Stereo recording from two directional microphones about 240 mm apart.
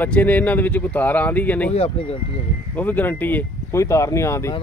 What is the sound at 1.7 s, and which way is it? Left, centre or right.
Speech, left.